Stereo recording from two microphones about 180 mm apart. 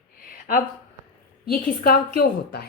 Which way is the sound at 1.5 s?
55° left (ahead or behind).